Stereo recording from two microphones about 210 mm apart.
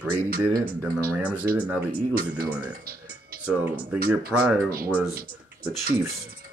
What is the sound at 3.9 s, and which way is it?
Speech, 45° right (ahead or behind).